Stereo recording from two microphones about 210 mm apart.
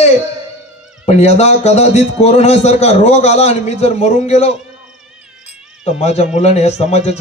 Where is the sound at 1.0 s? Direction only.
30° left (ahead or behind).